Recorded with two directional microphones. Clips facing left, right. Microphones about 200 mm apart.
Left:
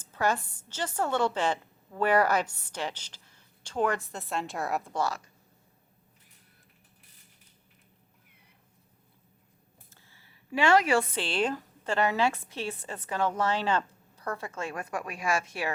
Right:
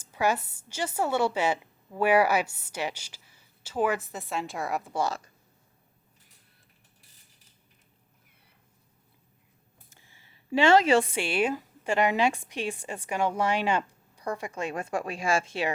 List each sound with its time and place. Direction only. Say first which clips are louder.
0.0 s a woman's voice: right 2 dB; 10° right (ahead or behind)
9.9 s a sound: even; 15° right (ahead or behind)
11.1 s a woman's voice: right 2 dB; 10° right (ahead or behind)